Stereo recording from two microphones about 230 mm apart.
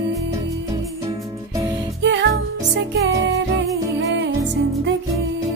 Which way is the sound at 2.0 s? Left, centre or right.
Right.